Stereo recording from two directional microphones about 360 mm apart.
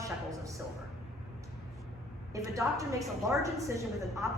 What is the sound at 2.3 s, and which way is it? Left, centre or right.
A woman's voice, centre.